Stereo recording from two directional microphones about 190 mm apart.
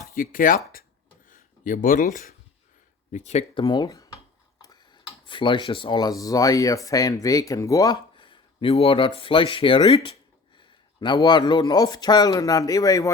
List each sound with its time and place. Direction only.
0.1 s speech: 45° left (ahead or behind)
1.6 s a man's voice: 45° left (ahead or behind); by 13.1 s 20° left (ahead or behind)